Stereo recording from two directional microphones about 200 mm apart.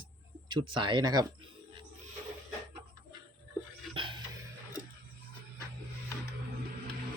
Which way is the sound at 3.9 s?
25° right (ahead or behind).